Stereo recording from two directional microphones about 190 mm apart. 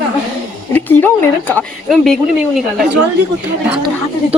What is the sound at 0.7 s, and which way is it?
Speech, 10° left (ahead or behind).